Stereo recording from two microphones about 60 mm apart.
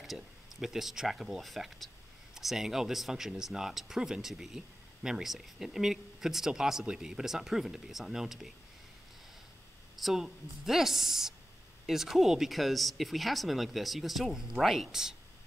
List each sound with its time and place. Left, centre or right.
0.0 s speech: centre
9.9 s speech: centre